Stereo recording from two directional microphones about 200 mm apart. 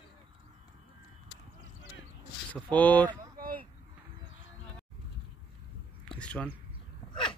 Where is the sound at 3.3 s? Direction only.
45° right (ahead or behind).